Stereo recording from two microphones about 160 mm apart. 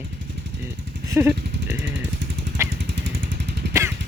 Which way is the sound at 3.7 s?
15° right (ahead or behind).